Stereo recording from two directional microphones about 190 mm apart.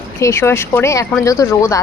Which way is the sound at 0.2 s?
15° left (ahead or behind).